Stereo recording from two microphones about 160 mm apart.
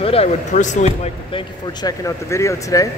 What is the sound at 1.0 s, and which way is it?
Speech, 35° left (ahead or behind).